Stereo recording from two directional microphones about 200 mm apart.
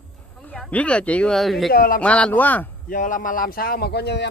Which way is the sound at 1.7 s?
45° left (ahead or behind).